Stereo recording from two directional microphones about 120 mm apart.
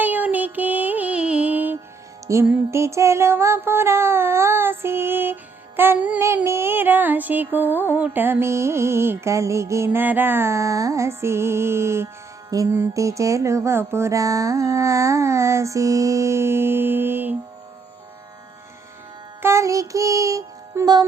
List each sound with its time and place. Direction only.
0.0 s music: 15° right (ahead or behind)
19.4 s music: 25° right (ahead or behind)